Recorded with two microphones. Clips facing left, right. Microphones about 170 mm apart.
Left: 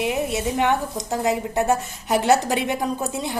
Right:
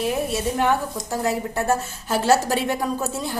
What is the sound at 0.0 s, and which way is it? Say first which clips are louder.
A woman's voice: even; 20° left (ahead or behind).